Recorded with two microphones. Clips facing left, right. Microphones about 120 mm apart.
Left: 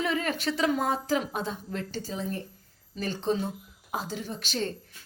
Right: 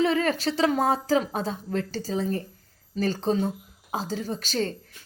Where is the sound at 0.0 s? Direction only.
35° right (ahead or behind).